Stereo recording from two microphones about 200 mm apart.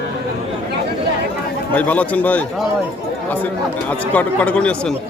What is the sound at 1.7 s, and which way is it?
Speech, 10° left (ahead or behind).